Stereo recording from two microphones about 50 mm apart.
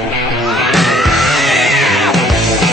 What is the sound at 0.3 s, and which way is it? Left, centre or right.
Music, centre.